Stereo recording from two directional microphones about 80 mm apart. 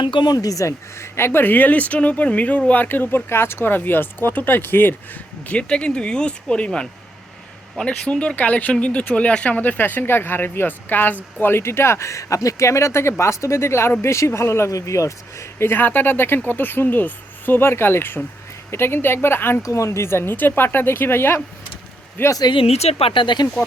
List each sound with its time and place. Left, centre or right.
0.0 s speech: left
5.5 s speech: centre
19.6 s speech: left
22.3 s speech: left
23.1 s speech: left